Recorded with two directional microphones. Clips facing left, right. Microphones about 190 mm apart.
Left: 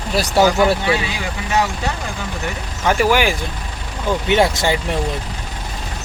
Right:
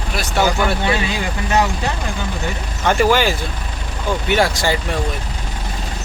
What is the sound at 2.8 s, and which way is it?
Speech, 5° left (ahead or behind).